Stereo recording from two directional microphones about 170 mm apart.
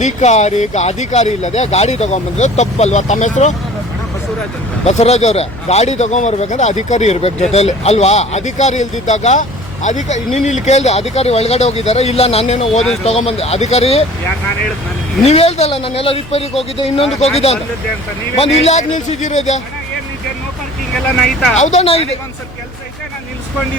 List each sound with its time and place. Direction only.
0.0 s speech: 40° left (ahead or behind)
4.9 s speech: 40° left (ahead or behind)
15.2 s speech: 40° left (ahead or behind)
20.9 s speech: 5° left (ahead or behind)
21.6 s speech: 40° left (ahead or behind)